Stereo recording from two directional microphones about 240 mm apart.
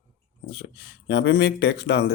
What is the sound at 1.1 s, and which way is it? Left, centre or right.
Speech, left.